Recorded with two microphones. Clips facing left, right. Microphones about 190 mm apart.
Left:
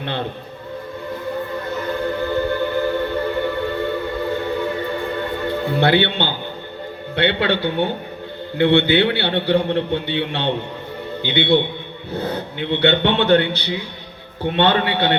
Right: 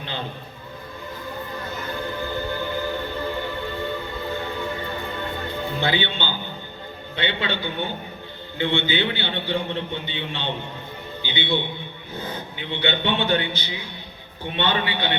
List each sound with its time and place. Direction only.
0.0 s a man's voice: 60° left (ahead or behind)
2.3 s music: 60° left (ahead or behind)
5.5 s a man's voice: 65° left (ahead or behind)